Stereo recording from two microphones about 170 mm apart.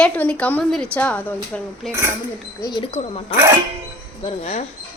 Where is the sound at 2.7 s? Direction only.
30° left (ahead or behind).